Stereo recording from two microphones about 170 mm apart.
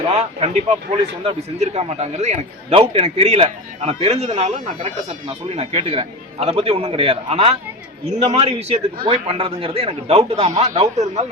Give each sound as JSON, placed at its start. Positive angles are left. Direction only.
{"t": 0.1, "sound": "a man's voice", "side_deg": -35}